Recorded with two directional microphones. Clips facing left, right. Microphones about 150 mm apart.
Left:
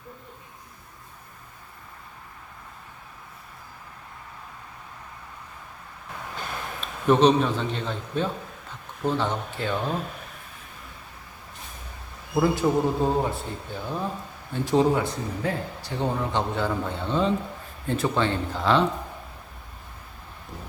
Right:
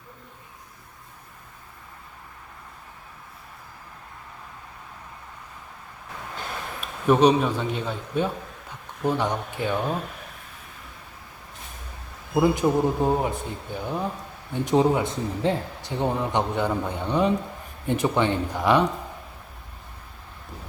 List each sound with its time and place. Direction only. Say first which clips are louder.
6.8 s a man's voice: right 1 dB; 10° right (ahead or behind)
12.3 s a man's voice: right 1 dB; 15° right (ahead or behind)